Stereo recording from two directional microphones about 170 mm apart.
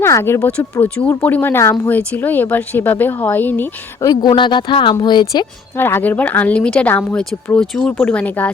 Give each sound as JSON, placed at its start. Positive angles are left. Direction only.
{"t": 0.0, "sound": "speech", "side_deg": 15}
{"t": 4.1, "sound": "speech", "side_deg": 25}
{"t": 5.7, "sound": "speech", "side_deg": 15}